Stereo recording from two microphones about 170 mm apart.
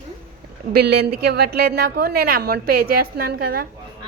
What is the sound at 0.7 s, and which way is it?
A woman's voice, 65° right (ahead or behind).